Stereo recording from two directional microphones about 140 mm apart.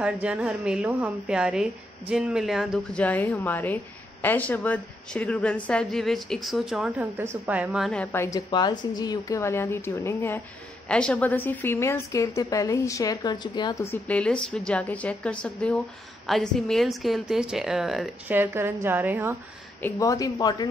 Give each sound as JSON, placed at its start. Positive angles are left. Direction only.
{"t": 0.0, "sound": "a woman's voice", "side_deg": -10}
{"t": 2.9, "sound": "a woman's voice", "side_deg": 10}
{"t": 7.9, "sound": "a woman's voice", "side_deg": 5}
{"t": 8.2, "sound": "a woman's voice", "side_deg": 25}
{"t": 14.0, "sound": "a woman's voice", "side_deg": 10}
{"t": 18.3, "sound": "a woman's voice", "side_deg": -15}
{"t": 19.8, "sound": "a woman's voice", "side_deg": 25}